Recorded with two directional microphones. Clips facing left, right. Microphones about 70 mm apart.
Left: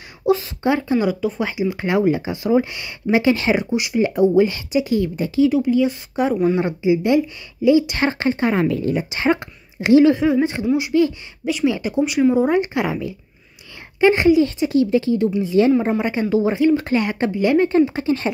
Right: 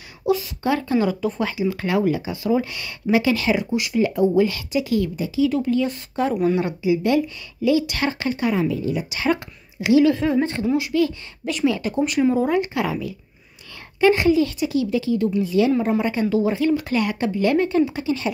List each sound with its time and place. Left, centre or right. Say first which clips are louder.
0.3 s speech: left 3 dB; left
5.1 s speech: left 4 dB; left
5.5 s speech: left 4 dB; centre
6.5 s speech: left 3 dB; left
8.6 s a woman's voice: left 3 dB; left
8.9 s speech: left 3 dB; left
10.4 s speech: left 2 dB; centre
12.4 s speech: left 3 dB; left
15.9 s speech: left 1 dB; left
17.6 s speech: left 3 dB; left